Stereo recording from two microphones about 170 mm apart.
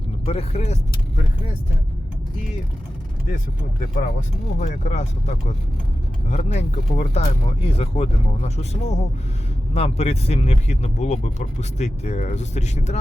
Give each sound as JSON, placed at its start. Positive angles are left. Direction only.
{"t": 0.3, "sound": "speech", "side_deg": 35}
{"t": 3.2, "sound": "speech", "side_deg": 50}